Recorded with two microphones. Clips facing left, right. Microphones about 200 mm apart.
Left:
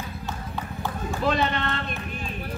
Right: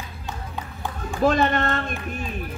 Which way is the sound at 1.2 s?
45° right (ahead or behind).